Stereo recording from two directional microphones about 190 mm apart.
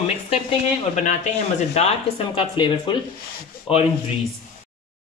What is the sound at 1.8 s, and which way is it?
Speech, 30° left (ahead or behind).